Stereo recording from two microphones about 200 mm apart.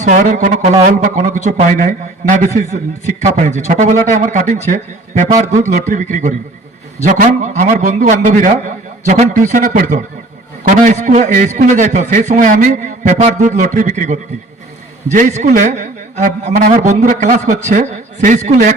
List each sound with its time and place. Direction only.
0.0 s a man's voice: 40° right (ahead or behind)